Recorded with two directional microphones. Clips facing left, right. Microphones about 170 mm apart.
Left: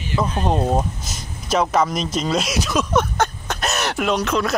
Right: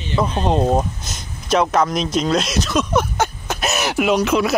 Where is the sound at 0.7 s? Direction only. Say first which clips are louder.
Right 2 dB; centre (ahead or behind).